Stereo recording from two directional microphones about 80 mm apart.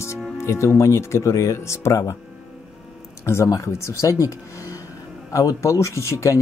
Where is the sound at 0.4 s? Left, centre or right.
Left.